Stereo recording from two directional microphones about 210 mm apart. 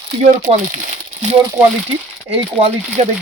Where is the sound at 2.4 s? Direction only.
30° right (ahead or behind).